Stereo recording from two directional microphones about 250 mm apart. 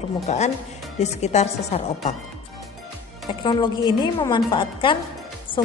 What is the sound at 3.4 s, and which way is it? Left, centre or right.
A woman's voice, centre.